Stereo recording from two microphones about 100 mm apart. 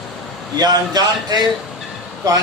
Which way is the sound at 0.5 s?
45° right (ahead or behind).